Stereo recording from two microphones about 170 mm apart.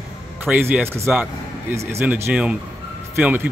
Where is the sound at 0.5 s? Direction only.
10° right (ahead or behind).